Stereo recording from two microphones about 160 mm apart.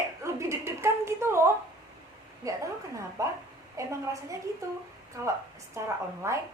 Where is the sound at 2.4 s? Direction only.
20° right (ahead or behind).